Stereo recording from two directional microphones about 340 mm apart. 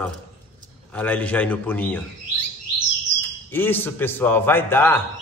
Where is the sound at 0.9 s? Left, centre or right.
Centre.